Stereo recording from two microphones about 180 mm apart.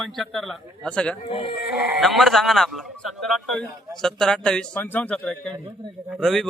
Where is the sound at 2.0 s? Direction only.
Centre (ahead or behind).